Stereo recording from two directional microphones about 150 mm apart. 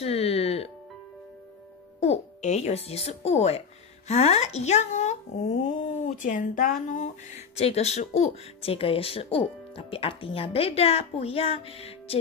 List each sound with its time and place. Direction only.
0.0 s music: 40° left (ahead or behind)
2.0 s speech: 45° left (ahead or behind)
6.9 s speech: 50° left (ahead or behind)